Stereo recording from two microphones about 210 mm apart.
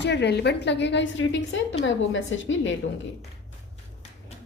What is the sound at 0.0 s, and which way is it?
A woman's voice, 55° left (ahead or behind).